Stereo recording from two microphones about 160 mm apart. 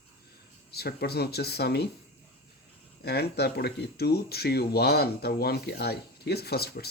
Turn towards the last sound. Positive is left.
turn(degrees=80)